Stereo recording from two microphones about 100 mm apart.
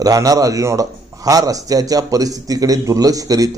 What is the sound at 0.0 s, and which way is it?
A man's voice, 35° right (ahead or behind).